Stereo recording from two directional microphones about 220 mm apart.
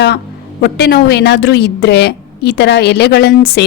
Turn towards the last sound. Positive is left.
turn(degrees=45)  # may be behind; listen again after turning